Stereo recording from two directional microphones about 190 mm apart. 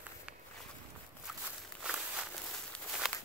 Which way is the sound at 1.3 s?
Centre (ahead or behind).